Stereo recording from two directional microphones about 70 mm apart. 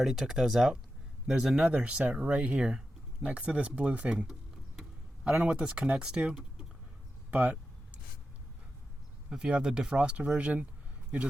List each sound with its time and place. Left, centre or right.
0.0 s speech: centre
7.3 s speech: right
9.3 s speech: centre